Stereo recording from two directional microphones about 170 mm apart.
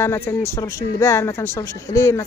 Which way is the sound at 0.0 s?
15° left (ahead or behind).